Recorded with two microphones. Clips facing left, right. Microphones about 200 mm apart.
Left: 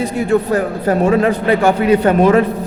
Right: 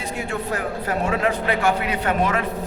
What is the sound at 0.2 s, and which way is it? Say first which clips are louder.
A man's voice: left 12 dB; 35° left (ahead or behind).